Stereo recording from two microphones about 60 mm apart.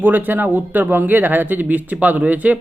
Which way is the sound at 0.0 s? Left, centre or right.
Right.